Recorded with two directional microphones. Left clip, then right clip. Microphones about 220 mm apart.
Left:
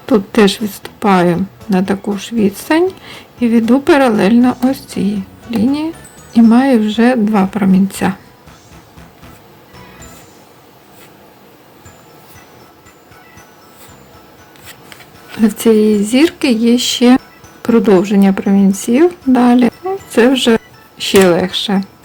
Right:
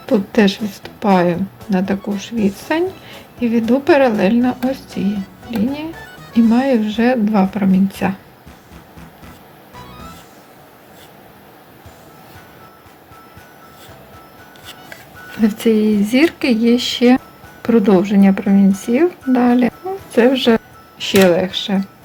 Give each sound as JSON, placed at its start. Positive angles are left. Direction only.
{"t": 0.0, "sound": "a woman's voice", "side_deg": 20}
{"t": 15.5, "sound": "a woman's voice", "side_deg": 15}